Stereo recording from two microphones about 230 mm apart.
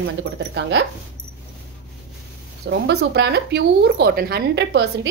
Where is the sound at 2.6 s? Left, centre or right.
Right.